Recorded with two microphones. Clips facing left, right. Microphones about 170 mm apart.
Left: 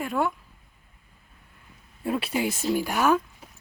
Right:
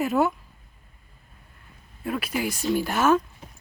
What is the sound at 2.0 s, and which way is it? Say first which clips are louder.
Speech: left 1 dB; 30° left (ahead or behind).